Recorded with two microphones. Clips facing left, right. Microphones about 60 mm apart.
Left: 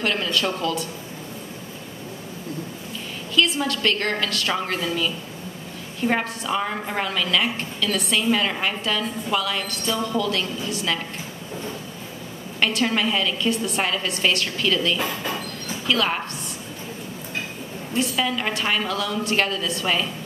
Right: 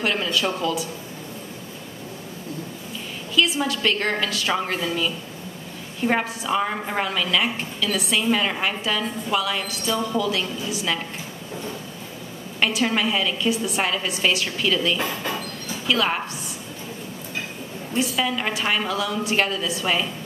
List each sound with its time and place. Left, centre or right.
0.0 s a woman's voice: centre
3.3 s a woman's voice: centre
12.5 s a woman's voice: centre
17.9 s a woman's voice: centre